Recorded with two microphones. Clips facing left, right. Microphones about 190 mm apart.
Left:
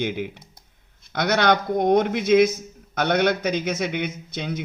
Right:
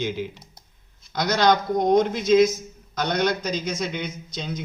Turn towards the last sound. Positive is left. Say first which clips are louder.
# left 2 dB
turn(degrees=60)  # may be behind; listen again after turning